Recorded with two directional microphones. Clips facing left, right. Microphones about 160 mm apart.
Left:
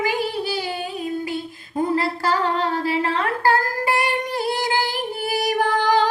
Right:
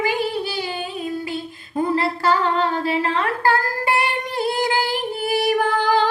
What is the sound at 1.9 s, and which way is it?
Singing, 40° left (ahead or behind).